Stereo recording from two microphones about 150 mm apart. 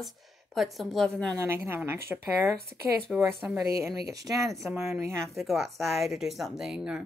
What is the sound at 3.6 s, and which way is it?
Speech, 20° right (ahead or behind).